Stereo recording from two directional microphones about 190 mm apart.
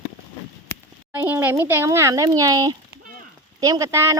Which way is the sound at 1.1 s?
10° right (ahead or behind).